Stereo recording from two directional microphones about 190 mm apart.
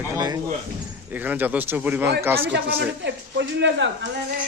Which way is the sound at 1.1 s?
10° right (ahead or behind).